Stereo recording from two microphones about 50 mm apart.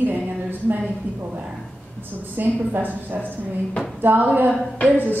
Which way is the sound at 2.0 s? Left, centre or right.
Right.